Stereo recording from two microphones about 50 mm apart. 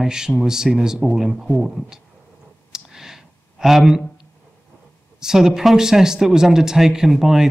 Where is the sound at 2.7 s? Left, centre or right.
Centre.